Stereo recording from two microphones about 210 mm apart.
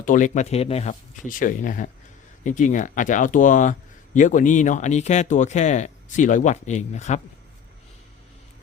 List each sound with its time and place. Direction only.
0.0 s speech: 40° left (ahead or behind)